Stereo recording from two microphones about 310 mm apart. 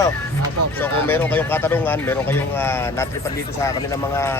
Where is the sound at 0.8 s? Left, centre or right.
Centre.